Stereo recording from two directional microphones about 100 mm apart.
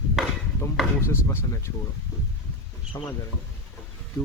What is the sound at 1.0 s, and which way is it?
Speech, 30° left (ahead or behind).